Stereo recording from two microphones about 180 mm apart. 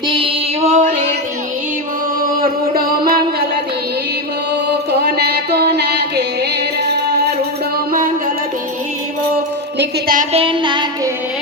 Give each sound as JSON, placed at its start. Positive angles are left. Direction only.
{"t": 0.2, "sound": "music", "side_deg": -40}
{"t": 2.4, "sound": "music", "side_deg": -55}
{"t": 5.0, "sound": "music", "side_deg": -60}
{"t": 10.3, "sound": "music", "side_deg": -30}